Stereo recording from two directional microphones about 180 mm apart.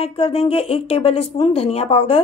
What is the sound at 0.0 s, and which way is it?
A woman's voice, 30° left (ahead or behind).